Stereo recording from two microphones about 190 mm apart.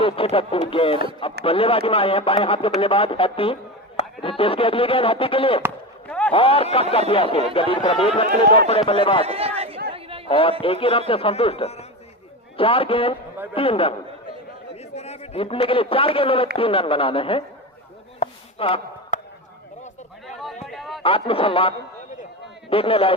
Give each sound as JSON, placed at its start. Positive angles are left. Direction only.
{"t": 0.0, "sound": "speech", "side_deg": 30}
{"t": 6.1, "sound": "a sound", "side_deg": 5}
{"t": 6.3, "sound": "speech", "side_deg": 30}
{"t": 9.2, "sound": "a sound", "side_deg": -30}
{"t": 9.9, "sound": "chatter", "side_deg": -30}
{"t": 10.2, "sound": "a man's voice", "side_deg": 30}
{"t": 14.9, "sound": "a man's voice", "side_deg": 35}
{"t": 18.2, "sound": "chop", "side_deg": 35}
{"t": 20.2, "sound": "a sound", "side_deg": 0}
{"t": 21.0, "sound": "speech", "side_deg": 30}